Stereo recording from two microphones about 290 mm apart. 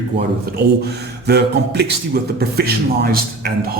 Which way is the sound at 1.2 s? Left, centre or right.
Right.